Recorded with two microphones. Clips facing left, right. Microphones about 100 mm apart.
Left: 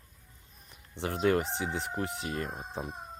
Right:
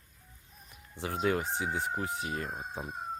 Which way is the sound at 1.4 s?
75° left (ahead or behind).